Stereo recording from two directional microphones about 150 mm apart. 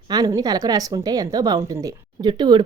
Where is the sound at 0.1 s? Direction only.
25° right (ahead or behind).